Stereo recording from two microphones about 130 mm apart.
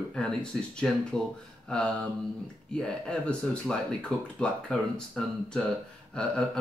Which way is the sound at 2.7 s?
5° left (ahead or behind).